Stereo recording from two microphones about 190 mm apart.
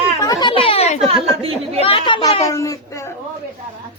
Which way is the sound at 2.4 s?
15° left (ahead or behind).